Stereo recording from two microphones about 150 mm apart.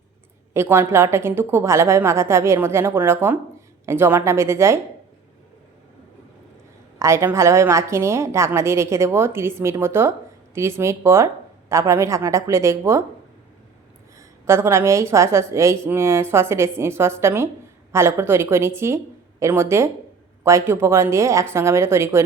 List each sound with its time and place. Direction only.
0.5 s a woman's voice: 15° right (ahead or behind)
7.0 s a woman's voice: 20° right (ahead or behind)
14.2 s a woman's voice: 20° right (ahead or behind)